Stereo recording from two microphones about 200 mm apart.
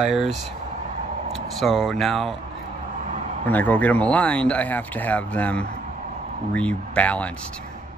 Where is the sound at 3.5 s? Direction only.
10° left (ahead or behind).